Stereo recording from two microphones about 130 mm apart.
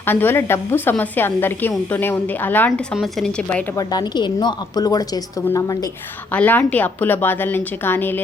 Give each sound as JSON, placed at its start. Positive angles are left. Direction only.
{"t": 0.0, "sound": "a woman's voice", "side_deg": 15}
{"t": 3.8, "sound": "a woman's voice", "side_deg": 30}
{"t": 6.3, "sound": "a woman's voice", "side_deg": 10}